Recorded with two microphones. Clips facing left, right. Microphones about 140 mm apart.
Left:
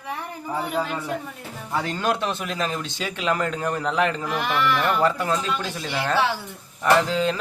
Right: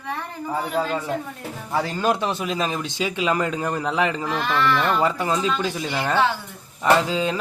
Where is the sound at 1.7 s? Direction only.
10° right (ahead or behind).